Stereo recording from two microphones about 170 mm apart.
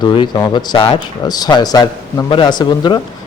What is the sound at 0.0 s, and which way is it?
A man's voice, 25° left (ahead or behind).